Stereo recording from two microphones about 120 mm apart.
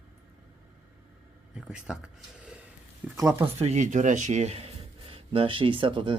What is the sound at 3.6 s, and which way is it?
Speech, 75° right (ahead or behind).